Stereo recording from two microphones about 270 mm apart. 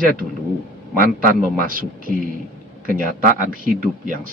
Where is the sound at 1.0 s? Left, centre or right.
Right.